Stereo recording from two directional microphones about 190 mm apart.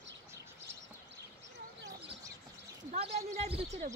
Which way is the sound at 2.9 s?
35° right (ahead or behind).